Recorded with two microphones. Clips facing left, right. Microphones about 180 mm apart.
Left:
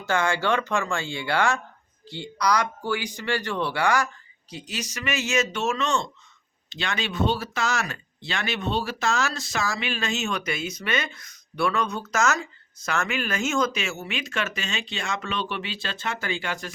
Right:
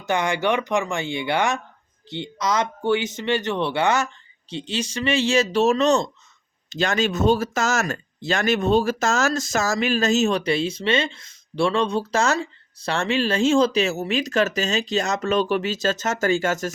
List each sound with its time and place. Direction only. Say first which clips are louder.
0.0 s speech: right 2 dB; 20° right (ahead or behind); by 16.7 s 45° right (ahead or behind)